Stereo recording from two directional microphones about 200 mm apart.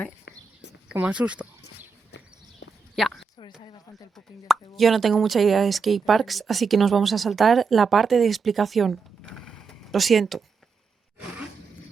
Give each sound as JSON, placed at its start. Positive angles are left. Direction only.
{"t": 0.3, "sound": "a sound", "side_deg": 65}
{"t": 0.9, "sound": "speech", "side_deg": -5}
{"t": 2.9, "sound": "speech", "side_deg": 0}
{"t": 4.7, "sound": "speech", "side_deg": 0}